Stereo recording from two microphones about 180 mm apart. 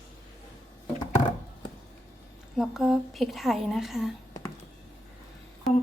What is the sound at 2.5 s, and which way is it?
A woman's voice, centre (ahead or behind).